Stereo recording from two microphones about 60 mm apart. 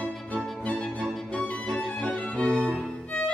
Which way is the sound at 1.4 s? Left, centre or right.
Left.